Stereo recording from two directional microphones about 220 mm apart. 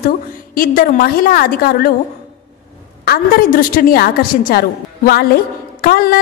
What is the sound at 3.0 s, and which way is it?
A woman's voice, 40° left (ahead or behind).